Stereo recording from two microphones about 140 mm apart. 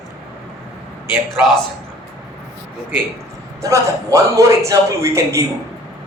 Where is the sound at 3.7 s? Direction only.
20° right (ahead or behind).